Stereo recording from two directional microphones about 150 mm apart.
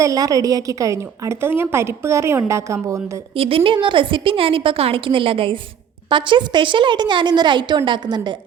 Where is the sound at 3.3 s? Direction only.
40° right (ahead or behind).